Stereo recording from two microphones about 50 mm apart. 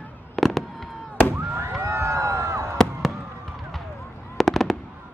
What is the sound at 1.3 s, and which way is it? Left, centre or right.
Fireworks, right.